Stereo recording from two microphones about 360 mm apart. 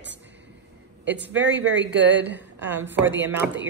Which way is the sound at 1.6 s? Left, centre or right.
Right.